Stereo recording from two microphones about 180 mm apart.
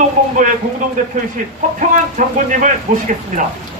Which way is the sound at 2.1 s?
45° right (ahead or behind).